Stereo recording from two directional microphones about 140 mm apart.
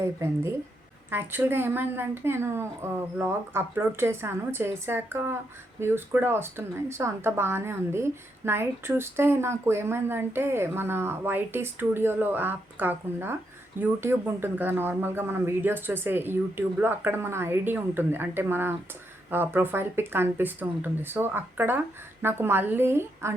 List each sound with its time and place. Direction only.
1.1 s speech: 15° right (ahead or behind)